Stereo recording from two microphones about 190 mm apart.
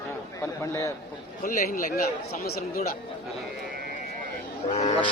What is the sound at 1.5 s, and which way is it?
Speech, 50° left (ahead or behind).